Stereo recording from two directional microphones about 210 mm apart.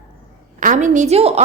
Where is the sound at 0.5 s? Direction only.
35° right (ahead or behind).